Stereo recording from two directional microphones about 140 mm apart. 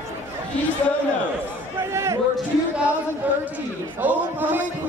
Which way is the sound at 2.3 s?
10° right (ahead or behind).